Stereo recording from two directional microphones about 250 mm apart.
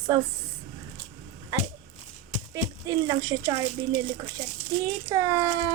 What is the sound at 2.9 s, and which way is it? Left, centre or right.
Speech, centre.